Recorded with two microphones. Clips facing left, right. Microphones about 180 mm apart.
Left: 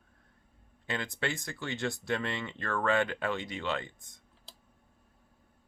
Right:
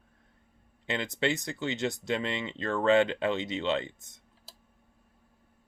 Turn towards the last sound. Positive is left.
turn(degrees=-25)  # may be behind; listen again after turning